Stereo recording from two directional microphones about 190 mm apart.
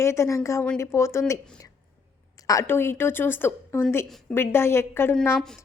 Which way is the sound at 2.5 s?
15° left (ahead or behind).